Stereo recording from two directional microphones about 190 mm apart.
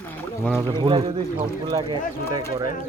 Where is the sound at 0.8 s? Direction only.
25° right (ahead or behind).